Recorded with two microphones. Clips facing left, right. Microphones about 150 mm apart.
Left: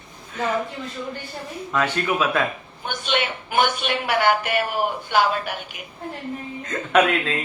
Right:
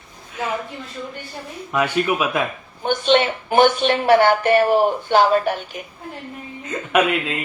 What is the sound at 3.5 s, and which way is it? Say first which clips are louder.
Speech: right 7 dB; 50° right (ahead or behind).